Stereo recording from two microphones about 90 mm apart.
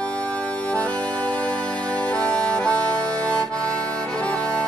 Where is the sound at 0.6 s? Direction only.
15° left (ahead or behind).